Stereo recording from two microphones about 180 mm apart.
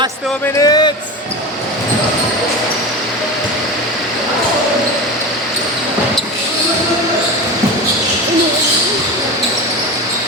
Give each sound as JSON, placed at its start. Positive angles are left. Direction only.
{"t": 0.6, "sound": "a man's voice", "side_deg": 25}